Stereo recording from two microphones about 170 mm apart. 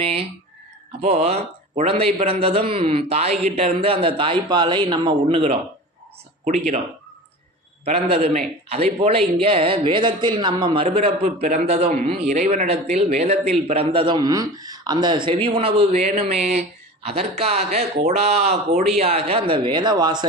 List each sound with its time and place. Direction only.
0.0 s a man's voice: 35° right (ahead or behind)
7.9 s a man's voice: 35° right (ahead or behind)